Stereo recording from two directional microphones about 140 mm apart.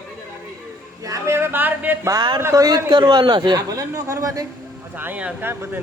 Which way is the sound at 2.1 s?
35° right (ahead or behind).